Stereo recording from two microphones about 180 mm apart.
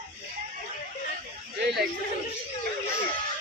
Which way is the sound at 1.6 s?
65° right (ahead or behind).